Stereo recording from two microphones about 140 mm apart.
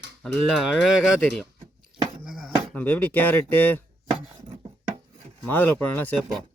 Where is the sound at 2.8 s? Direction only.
10° left (ahead or behind).